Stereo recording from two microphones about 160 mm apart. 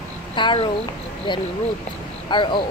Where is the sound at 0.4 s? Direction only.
30° left (ahead or behind).